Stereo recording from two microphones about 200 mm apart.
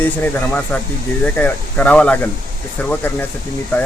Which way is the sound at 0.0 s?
10° left (ahead or behind).